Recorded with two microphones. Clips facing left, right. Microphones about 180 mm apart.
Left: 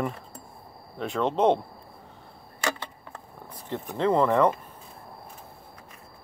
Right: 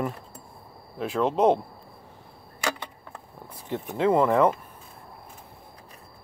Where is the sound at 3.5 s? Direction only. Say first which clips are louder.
Right 2 dB; 10° right (ahead or behind).